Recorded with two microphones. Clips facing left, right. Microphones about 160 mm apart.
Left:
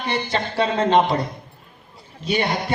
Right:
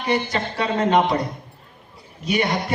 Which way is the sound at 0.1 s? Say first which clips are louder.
Right 2 dB; 30° left (ahead or behind).